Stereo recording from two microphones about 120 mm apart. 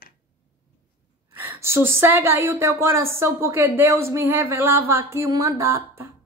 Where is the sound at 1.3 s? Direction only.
20° right (ahead or behind).